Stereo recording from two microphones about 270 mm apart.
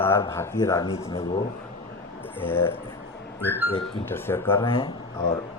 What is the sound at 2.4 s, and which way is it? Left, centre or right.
Speech, centre.